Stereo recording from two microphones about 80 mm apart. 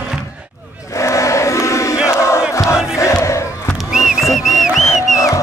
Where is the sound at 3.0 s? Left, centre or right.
Left.